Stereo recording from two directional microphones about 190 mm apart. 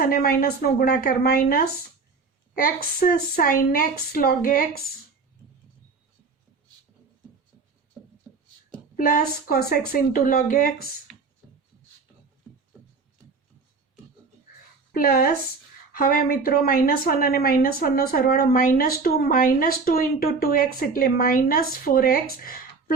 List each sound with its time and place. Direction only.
0.0 s a woman's voice: 50° left (ahead or behind)
9.0 s a woman's voice: 50° left (ahead or behind)
11.4 s a sound: centre (ahead or behind)
14.9 s a woman's voice: 50° left (ahead or behind)